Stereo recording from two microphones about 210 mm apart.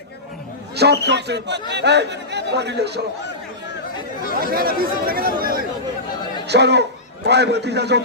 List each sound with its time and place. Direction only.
0.8 s speech: 55° right (ahead or behind)
4.4 s speech: 45° right (ahead or behind)